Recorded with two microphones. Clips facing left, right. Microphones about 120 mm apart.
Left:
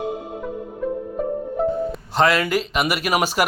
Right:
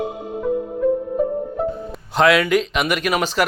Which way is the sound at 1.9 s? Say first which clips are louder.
Right 3 dB; centre (ahead or behind).